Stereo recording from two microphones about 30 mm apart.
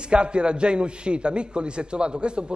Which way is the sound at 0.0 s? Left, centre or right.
Right.